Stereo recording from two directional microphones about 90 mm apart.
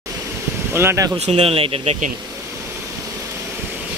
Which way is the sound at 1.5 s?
90° right.